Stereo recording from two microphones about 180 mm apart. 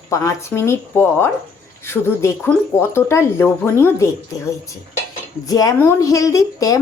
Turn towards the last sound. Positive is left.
turn(degrees=20)  # may be behind; listen again after turning